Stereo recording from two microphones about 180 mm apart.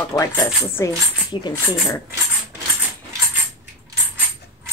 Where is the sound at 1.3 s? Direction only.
25° left (ahead or behind).